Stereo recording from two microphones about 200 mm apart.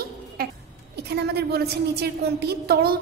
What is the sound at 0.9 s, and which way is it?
A woman's voice, 55° right (ahead or behind).